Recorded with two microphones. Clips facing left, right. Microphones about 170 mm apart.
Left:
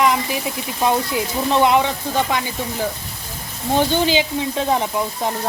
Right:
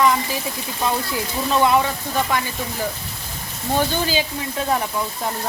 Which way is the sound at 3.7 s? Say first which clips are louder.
Left 4 dB; 20° left (ahead or behind).